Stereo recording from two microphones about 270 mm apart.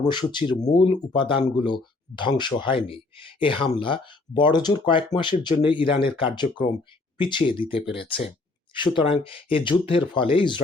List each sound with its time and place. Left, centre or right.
0.0 s speech: centre